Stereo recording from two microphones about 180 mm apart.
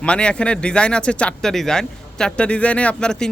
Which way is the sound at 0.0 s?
5° left (ahead or behind).